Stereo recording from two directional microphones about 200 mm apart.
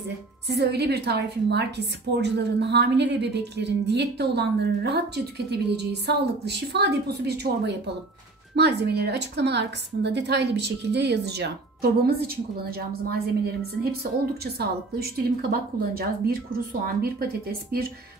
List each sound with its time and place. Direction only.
0.5 s a woman's voice: 55° right (ahead or behind)
14.4 s a woman's voice: 50° right (ahead or behind)